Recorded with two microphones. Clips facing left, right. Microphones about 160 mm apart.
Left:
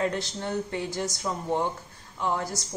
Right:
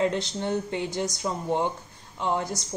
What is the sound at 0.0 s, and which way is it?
Speech, 20° right (ahead or behind).